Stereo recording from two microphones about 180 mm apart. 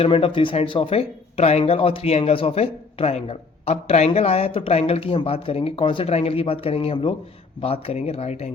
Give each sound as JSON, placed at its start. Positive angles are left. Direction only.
{"t": 0.0, "sound": "speech", "side_deg": 30}